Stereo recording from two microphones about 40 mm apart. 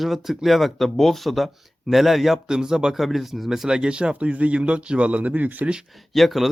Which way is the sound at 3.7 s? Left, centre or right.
Right.